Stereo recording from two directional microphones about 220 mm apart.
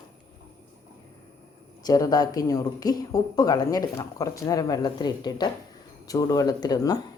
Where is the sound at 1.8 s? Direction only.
15° left (ahead or behind).